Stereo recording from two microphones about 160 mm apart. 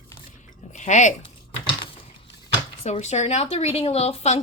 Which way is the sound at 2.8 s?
45° left (ahead or behind).